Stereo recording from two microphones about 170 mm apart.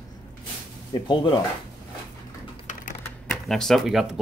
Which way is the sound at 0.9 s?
25° left (ahead or behind).